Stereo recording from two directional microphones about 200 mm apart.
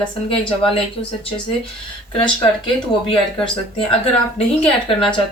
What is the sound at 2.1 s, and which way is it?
A woman's voice, 25° left (ahead or behind).